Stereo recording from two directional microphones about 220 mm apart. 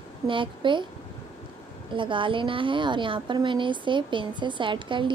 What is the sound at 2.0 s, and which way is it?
A woman's voice, 20° right (ahead or behind).